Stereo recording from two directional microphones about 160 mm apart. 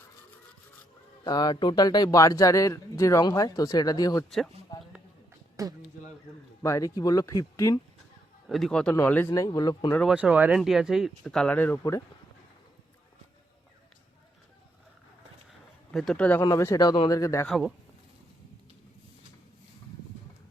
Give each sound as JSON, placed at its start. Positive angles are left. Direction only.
{"t": 1.2, "sound": "speech", "side_deg": 25}
{"t": 4.7, "sound": "a sound", "side_deg": 25}
{"t": 5.6, "sound": "speech", "side_deg": -20}
{"t": 6.6, "sound": "speech", "side_deg": 20}
{"t": 8.4, "sound": "speech", "side_deg": 0}
{"t": 10.1, "sound": "speech", "side_deg": -5}
{"t": 15.9, "sound": "speech", "side_deg": 0}
{"t": 16.4, "sound": "speech", "side_deg": 20}
{"t": 17.4, "sound": "speech", "side_deg": 0}